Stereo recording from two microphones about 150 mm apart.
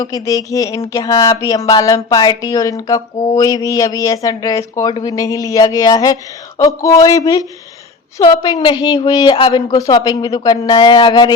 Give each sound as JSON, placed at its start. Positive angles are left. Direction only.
{"t": 0.0, "sound": "a woman's voice", "side_deg": 25}